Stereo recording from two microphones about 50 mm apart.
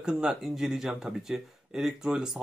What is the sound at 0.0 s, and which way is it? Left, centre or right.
Speech, centre.